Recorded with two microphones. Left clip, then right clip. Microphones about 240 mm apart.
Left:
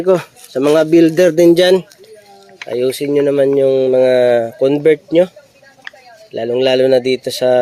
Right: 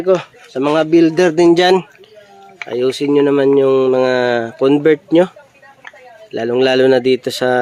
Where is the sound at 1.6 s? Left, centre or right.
Centre.